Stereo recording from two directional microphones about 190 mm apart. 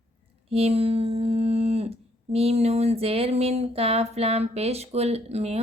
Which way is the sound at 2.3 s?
35° right (ahead or behind).